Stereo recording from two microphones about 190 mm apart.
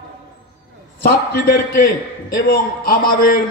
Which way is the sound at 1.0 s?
55° left (ahead or behind).